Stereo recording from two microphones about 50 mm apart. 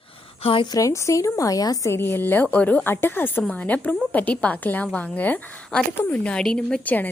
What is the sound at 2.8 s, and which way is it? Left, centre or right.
Speech, left.